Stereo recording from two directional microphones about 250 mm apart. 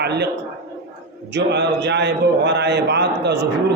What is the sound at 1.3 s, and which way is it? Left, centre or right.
A man's voice, right.